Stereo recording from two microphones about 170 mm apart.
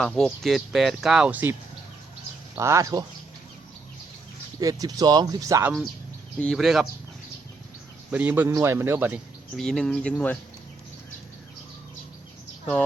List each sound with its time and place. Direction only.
0.0 s speech: 5° left (ahead or behind)
2.6 s a man's voice: 20° right (ahead or behind)
4.6 s speech: 20° right (ahead or behind)
6.4 s speech: centre (ahead or behind)
8.1 s a man's voice: 10° right (ahead or behind)
9.6 s speech: 5° left (ahead or behind)